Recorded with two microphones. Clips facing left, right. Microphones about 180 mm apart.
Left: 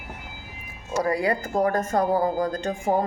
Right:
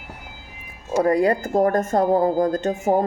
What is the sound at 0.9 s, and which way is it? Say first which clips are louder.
Speech: right 6 dB; 50° right (ahead or behind).